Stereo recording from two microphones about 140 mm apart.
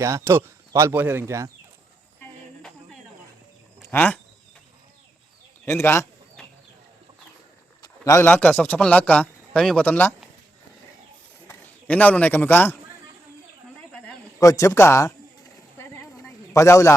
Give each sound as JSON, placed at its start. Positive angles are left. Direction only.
{"t": 0.0, "sound": "speech", "side_deg": -20}
{"t": 2.6, "sound": "cricket", "side_deg": 5}
{"t": 3.9, "sound": "speech", "side_deg": 10}
{"t": 5.6, "sound": "speech", "side_deg": 15}
{"t": 7.8, "sound": "a sound", "side_deg": 20}
{"t": 8.3, "sound": "speech", "side_deg": 10}
{"t": 11.4, "sound": "a man's voice", "side_deg": 10}
{"t": 14.3, "sound": "speech", "side_deg": 20}
{"t": 15.8, "sound": "a sound", "side_deg": 20}